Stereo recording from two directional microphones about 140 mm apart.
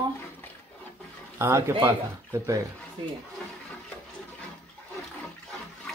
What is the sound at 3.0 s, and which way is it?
Speech, 40° right (ahead or behind).